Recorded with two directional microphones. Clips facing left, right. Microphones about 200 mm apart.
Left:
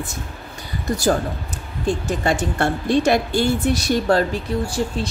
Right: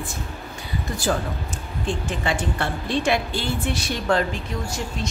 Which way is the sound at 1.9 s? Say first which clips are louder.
Left 5 dB; 40° left (ahead or behind).